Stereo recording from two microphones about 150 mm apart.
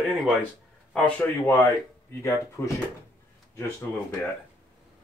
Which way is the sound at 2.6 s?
15° left (ahead or behind).